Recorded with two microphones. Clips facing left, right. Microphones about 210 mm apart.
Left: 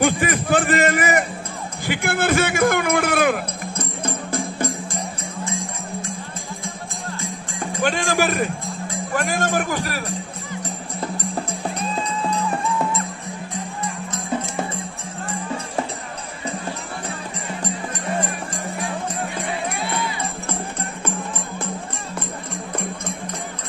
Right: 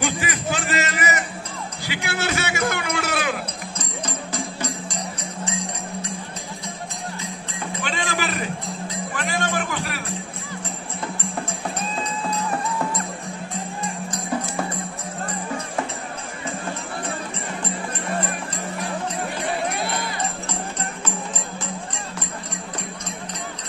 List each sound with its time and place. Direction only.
0.0 s a sound: 55° left (ahead or behind)
1.9 s music: 50° left (ahead or behind)
7.7 s music: 45° left (ahead or behind)